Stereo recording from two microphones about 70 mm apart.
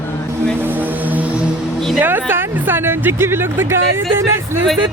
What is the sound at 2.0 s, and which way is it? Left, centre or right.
Speech, right.